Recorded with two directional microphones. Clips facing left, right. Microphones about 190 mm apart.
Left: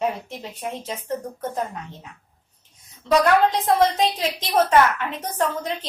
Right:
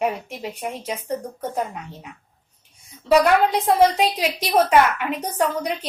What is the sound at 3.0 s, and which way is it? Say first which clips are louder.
A woman's voice: right 1 dB; 10° right (ahead or behind).